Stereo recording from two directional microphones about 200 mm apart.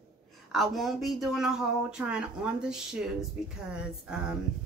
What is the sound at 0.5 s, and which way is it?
Speech, centre (ahead or behind).